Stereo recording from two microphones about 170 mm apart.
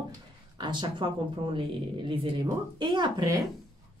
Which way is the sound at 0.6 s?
25° right (ahead or behind).